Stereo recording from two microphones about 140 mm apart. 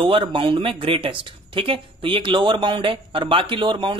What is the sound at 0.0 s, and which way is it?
Speech, 35° right (ahead or behind).